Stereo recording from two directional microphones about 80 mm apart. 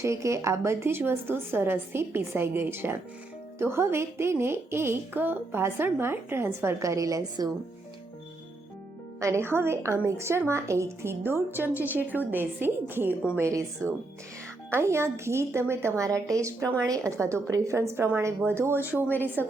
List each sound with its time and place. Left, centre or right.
0.0 s a woman's voice: right
9.2 s a woman's voice: right
13.3 s a woman's voice: right